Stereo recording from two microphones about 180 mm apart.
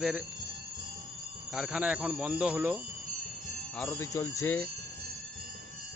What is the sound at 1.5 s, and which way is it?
Speech, 5° right (ahead or behind).